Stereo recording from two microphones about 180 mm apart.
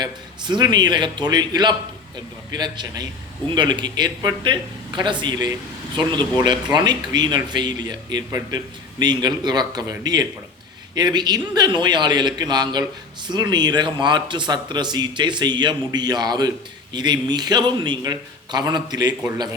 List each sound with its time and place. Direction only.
0.0 s speech: 25° right (ahead or behind)